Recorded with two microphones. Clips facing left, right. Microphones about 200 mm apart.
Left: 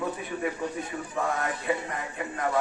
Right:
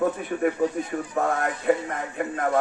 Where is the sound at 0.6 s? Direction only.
45° right (ahead or behind).